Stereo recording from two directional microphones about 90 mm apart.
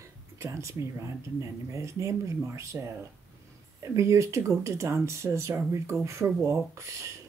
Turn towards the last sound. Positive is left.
turn(degrees=-35)  # may be behind; listen again after turning